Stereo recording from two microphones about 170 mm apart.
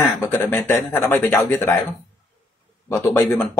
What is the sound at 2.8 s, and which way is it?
Speech, 15° left (ahead or behind).